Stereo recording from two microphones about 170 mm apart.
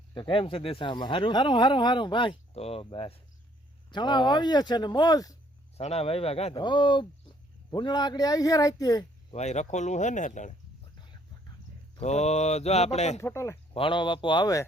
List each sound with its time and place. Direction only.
0.1 s speech: 30° left (ahead or behind)
5.7 s speech: 35° left (ahead or behind); by 9.0 s 20° left (ahead or behind)
9.3 s speech: 40° left (ahead or behind)
11.9 s speech: 40° left (ahead or behind)
13.1 s speech: 15° left (ahead or behind)
13.7 s speech: 30° left (ahead or behind)